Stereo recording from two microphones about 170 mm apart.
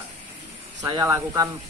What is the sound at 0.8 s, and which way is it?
Speech, 20° right (ahead or behind).